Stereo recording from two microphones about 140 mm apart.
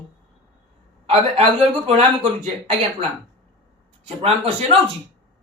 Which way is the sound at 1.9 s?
45° right (ahead or behind).